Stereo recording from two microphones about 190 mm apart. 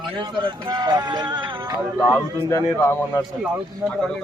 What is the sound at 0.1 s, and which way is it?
Speech, 25° right (ahead or behind).